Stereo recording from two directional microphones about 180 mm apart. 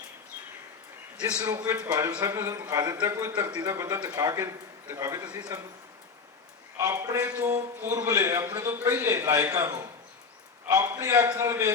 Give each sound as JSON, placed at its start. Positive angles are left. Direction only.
{"t": 1.4, "sound": "a man's voice", "side_deg": -20}
{"t": 6.7, "sound": "a man's voice", "side_deg": -20}